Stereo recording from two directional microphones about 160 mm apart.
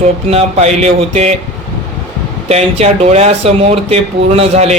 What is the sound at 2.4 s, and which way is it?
Speech, 40° right (ahead or behind).